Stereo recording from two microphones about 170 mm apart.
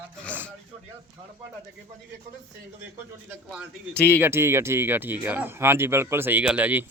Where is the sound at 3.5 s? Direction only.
Centre (ahead or behind).